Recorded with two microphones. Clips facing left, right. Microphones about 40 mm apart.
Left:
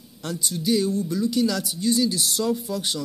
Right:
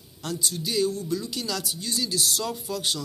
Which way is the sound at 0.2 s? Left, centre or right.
Left.